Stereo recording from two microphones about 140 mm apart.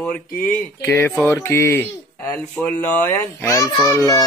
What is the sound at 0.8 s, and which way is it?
A child's voice, 15° left (ahead or behind).